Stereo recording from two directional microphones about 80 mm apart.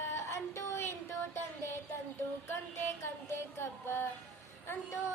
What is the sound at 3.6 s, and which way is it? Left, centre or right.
Speech, left.